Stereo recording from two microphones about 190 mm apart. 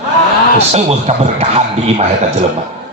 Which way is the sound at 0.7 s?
35° right (ahead or behind).